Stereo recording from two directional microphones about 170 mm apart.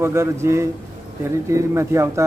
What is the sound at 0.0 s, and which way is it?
Speech, 15° right (ahead or behind).